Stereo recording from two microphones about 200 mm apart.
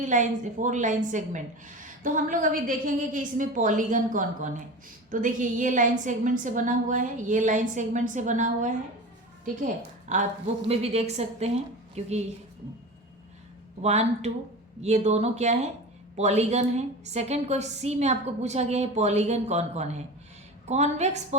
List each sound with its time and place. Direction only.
0.0 s a woman's voice: 40° right (ahead or behind)
13.8 s a woman's voice: 35° right (ahead or behind)